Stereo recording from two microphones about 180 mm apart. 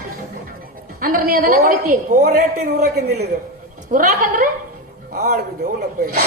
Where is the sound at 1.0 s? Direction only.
50° right (ahead or behind).